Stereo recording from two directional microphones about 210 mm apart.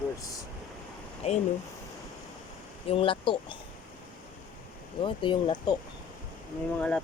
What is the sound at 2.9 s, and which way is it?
Speech, 25° left (ahead or behind).